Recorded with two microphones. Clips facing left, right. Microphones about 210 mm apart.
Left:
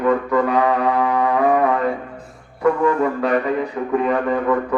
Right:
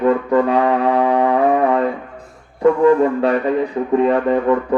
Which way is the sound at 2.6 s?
30° right (ahead or behind).